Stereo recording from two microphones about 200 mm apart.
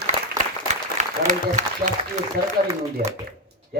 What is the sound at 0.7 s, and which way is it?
Applause, 35° right (ahead or behind).